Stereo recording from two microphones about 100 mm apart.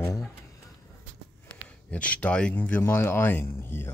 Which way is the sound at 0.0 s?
30° left (ahead or behind).